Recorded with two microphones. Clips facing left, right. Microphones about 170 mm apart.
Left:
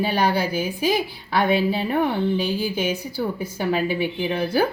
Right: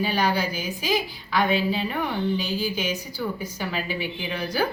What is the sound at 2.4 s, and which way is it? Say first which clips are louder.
Speech: left 4 dB; 55° left (ahead or behind).